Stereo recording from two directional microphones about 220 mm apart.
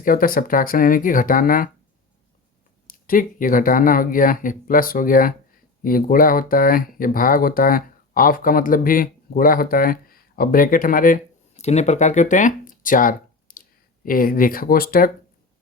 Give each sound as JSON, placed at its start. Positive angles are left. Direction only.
{"t": 0.0, "sound": "speech", "side_deg": 40}
{"t": 2.8, "sound": "speech", "side_deg": 40}